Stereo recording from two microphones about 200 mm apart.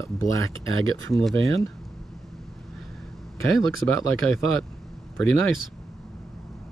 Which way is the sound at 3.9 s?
90° right.